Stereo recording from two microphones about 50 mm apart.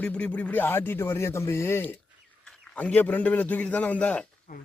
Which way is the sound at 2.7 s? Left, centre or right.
Left.